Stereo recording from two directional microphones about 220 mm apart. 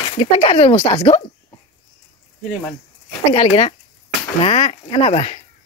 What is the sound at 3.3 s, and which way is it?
Speech, 25° left (ahead or behind).